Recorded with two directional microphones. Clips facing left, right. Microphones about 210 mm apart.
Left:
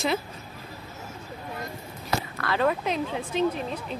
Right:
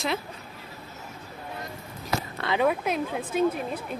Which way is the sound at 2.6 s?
10° right (ahead or behind).